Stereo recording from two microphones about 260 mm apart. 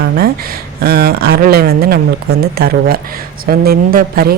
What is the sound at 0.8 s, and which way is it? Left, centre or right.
A woman's voice, right.